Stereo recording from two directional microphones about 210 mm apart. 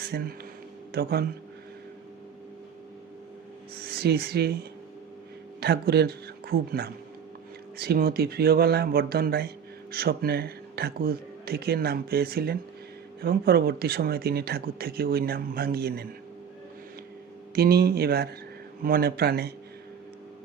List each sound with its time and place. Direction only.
0.0 s speech: 45° right (ahead or behind)
3.8 s speech: 50° right (ahead or behind)
17.5 s speech: 50° right (ahead or behind)